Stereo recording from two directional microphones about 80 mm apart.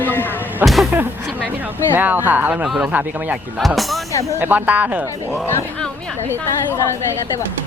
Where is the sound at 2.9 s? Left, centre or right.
Right.